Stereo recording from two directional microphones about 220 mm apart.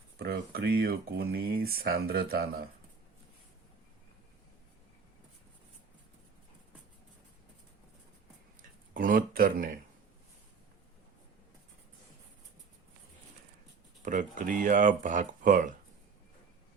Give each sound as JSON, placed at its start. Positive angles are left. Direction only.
{"t": 0.2, "sound": "speech", "side_deg": -45}
{"t": 8.9, "sound": "speech", "side_deg": -40}
{"t": 14.0, "sound": "speech", "side_deg": -35}